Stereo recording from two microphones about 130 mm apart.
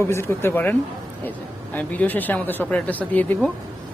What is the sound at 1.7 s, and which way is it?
Speech, 15° left (ahead or behind).